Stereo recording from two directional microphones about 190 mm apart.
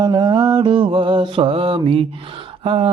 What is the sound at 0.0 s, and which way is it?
Mantra, 20° right (ahead or behind).